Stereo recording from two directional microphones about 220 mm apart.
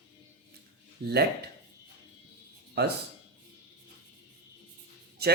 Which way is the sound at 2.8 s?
45° right (ahead or behind).